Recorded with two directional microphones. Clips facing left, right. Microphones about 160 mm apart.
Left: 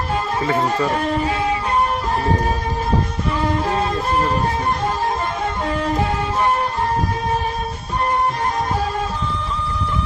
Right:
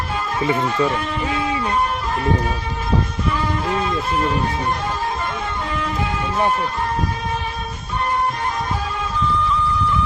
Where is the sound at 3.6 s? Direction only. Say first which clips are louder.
Left 1 dB; 35° left (ahead or behind).